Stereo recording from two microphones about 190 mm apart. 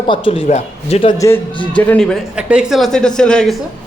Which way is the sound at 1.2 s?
15° left (ahead or behind).